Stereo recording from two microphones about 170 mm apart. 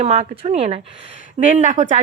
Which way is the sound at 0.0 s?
40° right (ahead or behind).